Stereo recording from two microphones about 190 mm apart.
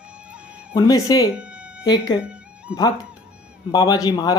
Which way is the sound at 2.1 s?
5° right (ahead or behind).